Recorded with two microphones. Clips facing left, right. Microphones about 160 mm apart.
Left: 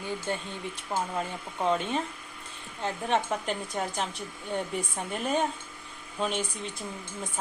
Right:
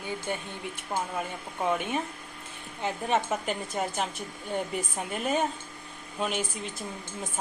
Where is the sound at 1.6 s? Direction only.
10° right (ahead or behind).